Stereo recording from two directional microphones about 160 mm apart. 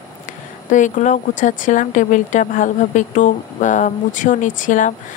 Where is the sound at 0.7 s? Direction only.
50° left (ahead or behind).